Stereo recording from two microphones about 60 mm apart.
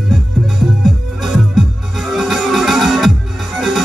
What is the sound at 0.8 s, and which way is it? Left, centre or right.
Music, centre.